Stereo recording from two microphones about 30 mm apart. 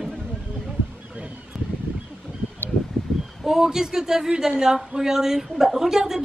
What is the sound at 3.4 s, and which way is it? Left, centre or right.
A woman's voice, centre.